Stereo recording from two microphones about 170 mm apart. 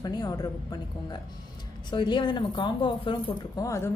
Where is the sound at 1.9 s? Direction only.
25° left (ahead or behind).